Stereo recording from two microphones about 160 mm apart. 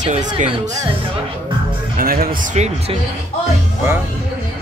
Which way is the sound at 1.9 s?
65° right (ahead or behind).